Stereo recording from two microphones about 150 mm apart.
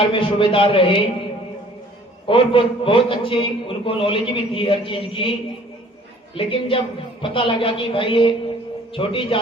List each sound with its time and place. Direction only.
0.0 s a man's voice: 35° left (ahead or behind)
2.2 s a man's voice: 35° left (ahead or behind)
6.3 s a man's voice: 35° left (ahead or behind)